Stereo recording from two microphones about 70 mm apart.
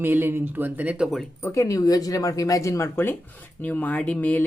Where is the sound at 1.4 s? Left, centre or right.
Left.